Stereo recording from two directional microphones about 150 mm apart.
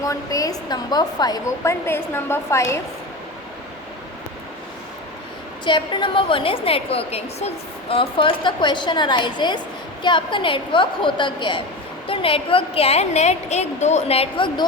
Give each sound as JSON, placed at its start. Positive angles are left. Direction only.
{"t": 0.0, "sound": "speech", "side_deg": 20}
{"t": 5.6, "sound": "a woman's voice", "side_deg": 30}